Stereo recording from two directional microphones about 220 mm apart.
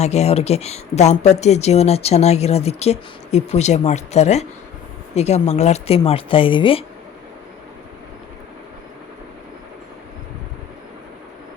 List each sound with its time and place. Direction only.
0.0 s speech: 30° left (ahead or behind)